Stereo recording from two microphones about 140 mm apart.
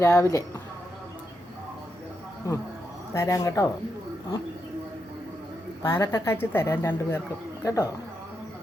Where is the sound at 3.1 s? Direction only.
20° left (ahead or behind).